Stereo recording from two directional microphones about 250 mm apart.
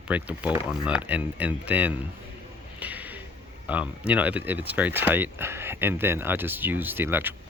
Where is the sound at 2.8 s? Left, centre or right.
Centre.